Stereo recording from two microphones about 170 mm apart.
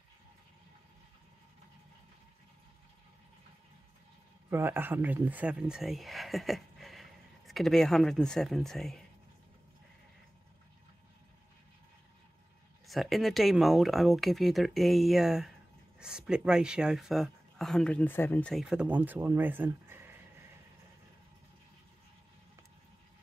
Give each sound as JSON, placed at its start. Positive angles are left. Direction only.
{"t": 4.5, "sound": "speech", "side_deg": -15}
{"t": 12.8, "sound": "speech", "side_deg": 0}
{"t": 18.5, "sound": "speech", "side_deg": 0}